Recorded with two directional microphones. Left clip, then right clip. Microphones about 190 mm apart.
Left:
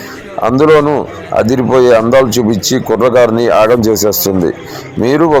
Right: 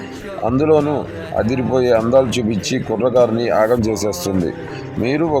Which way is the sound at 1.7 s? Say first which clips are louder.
Left 6 dB; 15° left (ahead or behind).